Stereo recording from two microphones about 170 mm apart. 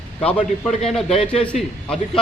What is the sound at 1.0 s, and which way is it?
Speech, 35° left (ahead or behind).